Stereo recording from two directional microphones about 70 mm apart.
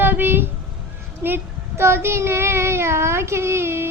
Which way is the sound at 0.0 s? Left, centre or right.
Right.